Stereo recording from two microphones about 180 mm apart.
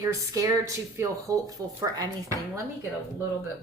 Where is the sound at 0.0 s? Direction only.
15° right (ahead or behind).